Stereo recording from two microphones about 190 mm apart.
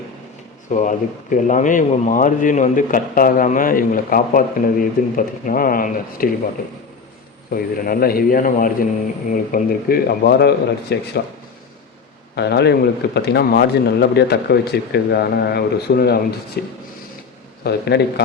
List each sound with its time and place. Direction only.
0.7 s speech: 40° left (ahead or behind)
7.5 s speech: 50° left (ahead or behind)
12.4 s speech: 60° left (ahead or behind)